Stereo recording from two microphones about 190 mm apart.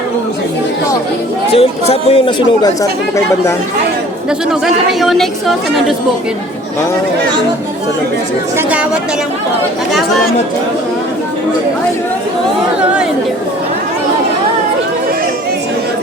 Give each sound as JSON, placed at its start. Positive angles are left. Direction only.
{"t": 1.5, "sound": "speech", "side_deg": 30}
{"t": 4.6, "sound": "a woman's voice", "side_deg": 0}
{"t": 8.5, "sound": "a woman's voice", "side_deg": -5}